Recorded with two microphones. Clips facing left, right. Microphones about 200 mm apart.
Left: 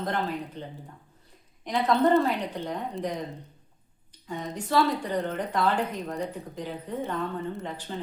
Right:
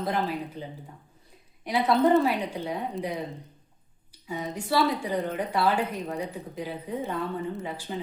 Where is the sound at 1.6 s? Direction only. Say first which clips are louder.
Right 1 dB; 10° right (ahead or behind).